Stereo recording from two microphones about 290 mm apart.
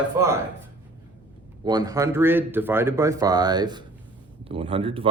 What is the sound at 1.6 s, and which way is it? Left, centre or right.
Speech, centre.